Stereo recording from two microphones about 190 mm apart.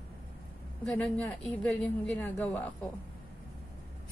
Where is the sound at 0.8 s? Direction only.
5° left (ahead or behind).